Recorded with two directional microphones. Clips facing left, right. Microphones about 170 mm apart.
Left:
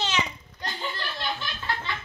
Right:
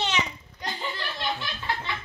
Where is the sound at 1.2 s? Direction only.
15° right (ahead or behind).